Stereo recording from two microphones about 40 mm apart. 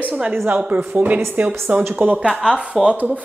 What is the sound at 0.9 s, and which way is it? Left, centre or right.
Speech, right.